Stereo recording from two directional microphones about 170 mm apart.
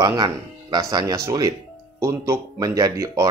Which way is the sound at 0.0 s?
25° right (ahead or behind).